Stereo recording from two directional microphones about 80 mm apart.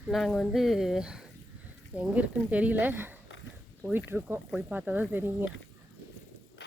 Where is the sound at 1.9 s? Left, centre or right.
Centre.